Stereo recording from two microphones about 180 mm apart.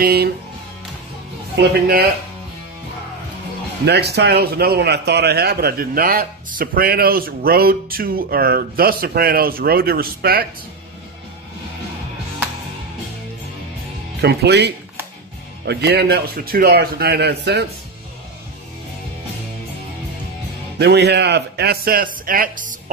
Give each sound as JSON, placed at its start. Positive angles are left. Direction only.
{"t": 0.0, "sound": "a man's voice", "side_deg": -60}
{"t": 1.6, "sound": "a man's voice", "side_deg": -60}
{"t": 3.8, "sound": "a man's voice", "side_deg": -65}
{"t": 14.2, "sound": "a man's voice", "side_deg": -65}
{"t": 20.8, "sound": "a man's voice", "side_deg": -70}